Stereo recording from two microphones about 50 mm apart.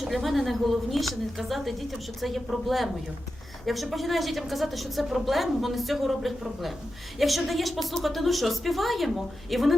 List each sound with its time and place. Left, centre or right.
0.0 s a woman's voice: centre